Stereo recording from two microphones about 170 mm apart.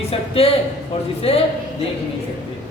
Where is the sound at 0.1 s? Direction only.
35° left (ahead or behind).